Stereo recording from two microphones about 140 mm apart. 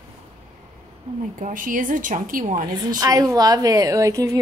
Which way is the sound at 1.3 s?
70° right (ahead or behind).